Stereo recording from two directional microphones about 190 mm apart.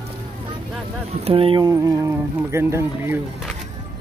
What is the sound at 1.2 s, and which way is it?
Speech, 30° right (ahead or behind).